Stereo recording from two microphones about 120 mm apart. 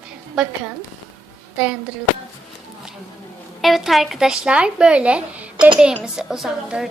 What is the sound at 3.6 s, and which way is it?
A woman's voice, centre (ahead or behind).